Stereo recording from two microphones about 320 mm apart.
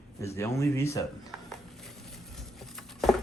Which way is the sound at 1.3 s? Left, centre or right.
Centre.